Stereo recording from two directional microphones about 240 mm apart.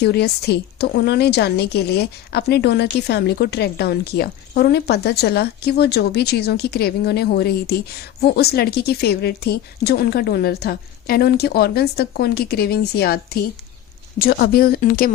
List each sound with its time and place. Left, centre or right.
0.0 s a woman's voice: left